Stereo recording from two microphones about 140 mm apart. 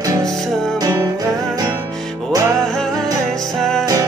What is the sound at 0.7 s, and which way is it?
Music, 25° right (ahead or behind).